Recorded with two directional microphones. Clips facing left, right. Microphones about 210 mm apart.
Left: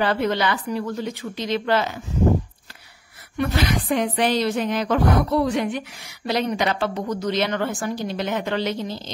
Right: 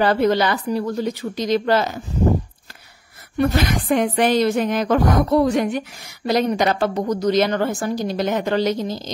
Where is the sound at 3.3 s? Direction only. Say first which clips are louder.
Right 3 dB; 45° right (ahead or behind).